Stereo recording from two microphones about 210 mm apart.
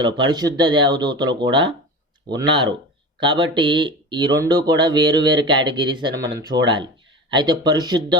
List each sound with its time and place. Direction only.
0.0 s speech: 20° right (ahead or behind)